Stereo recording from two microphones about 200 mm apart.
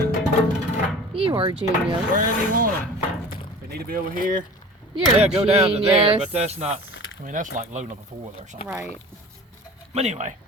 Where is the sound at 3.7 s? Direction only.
45° right (ahead or behind).